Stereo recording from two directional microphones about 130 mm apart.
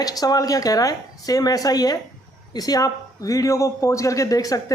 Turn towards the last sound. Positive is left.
turn(degrees=25)  # may be behind; listen again after turning